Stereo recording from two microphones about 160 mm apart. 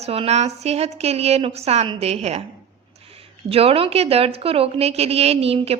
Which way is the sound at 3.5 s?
35° right (ahead or behind).